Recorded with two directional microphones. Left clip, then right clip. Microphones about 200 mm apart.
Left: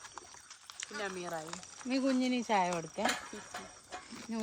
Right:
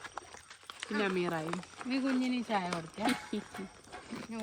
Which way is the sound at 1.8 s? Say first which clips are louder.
Left 1 dB; 20° left (ahead or behind).